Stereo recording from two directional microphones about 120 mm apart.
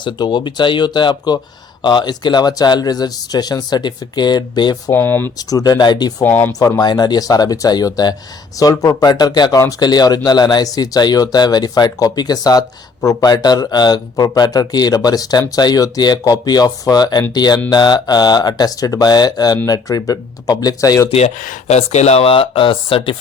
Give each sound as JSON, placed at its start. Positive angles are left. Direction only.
{"t": 0.0, "sound": "speech", "side_deg": 40}
{"t": 4.9, "sound": "speech", "side_deg": 15}
{"t": 5.4, "sound": "speech", "side_deg": 30}
{"t": 6.2, "sound": "speech", "side_deg": 15}
{"t": 6.6, "sound": "speech", "side_deg": 30}
{"t": 21.1, "sound": "speech", "side_deg": 65}